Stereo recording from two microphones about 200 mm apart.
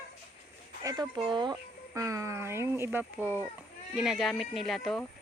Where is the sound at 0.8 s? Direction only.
20° right (ahead or behind).